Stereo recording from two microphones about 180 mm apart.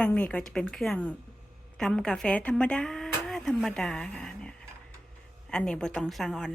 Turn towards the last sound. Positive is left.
turn(degrees=0)  # may be behind; listen again after turning